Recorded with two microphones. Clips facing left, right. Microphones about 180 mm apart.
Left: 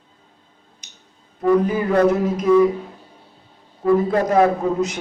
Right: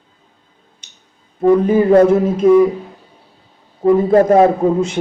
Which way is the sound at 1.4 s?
30° right (ahead or behind).